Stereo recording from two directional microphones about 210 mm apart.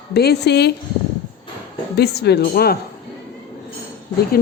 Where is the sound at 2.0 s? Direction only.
50° left (ahead or behind).